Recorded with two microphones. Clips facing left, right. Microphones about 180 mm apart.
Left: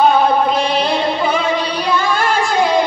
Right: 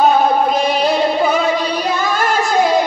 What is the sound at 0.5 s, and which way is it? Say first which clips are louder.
Female singing: right 1 dB; 45° right (ahead or behind).